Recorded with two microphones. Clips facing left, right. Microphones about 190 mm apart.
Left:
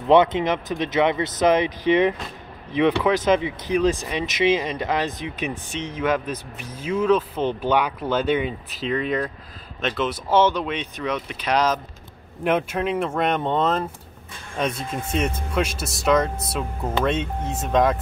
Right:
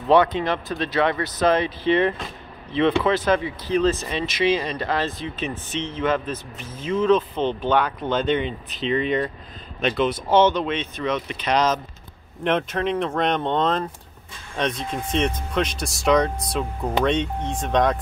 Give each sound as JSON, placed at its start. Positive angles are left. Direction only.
{"t": 0.1, "sound": "speech", "side_deg": 20}